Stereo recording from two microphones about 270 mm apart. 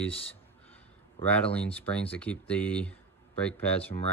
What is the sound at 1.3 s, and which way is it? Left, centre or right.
Speech, centre.